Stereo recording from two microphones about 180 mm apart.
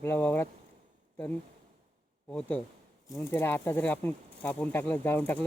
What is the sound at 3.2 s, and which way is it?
Speech, 10° left (ahead or behind).